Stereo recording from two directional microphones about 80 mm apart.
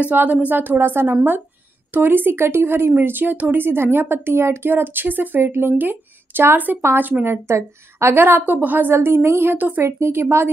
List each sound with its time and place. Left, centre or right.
0.0 s speech: centre
7.4 s speech: right
9.8 s a woman's voice: right